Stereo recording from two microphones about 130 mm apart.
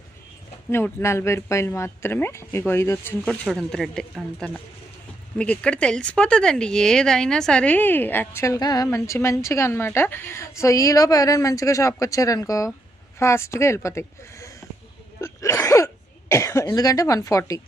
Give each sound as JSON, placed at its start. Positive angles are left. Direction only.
{"t": 0.7, "sound": "speech", "side_deg": 20}
{"t": 3.2, "sound": "speech", "side_deg": 5}
{"t": 15.2, "sound": "throat clearing", "side_deg": 20}
{"t": 16.3, "sound": "speech", "side_deg": 20}